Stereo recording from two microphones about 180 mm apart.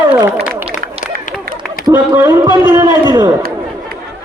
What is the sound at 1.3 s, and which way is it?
Run, 45° left (ahead or behind).